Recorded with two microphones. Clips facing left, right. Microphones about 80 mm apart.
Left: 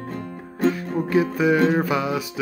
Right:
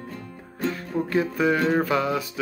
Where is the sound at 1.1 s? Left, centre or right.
Centre.